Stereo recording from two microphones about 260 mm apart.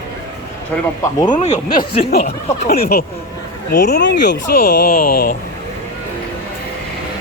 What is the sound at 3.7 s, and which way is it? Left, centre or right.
Speech, left.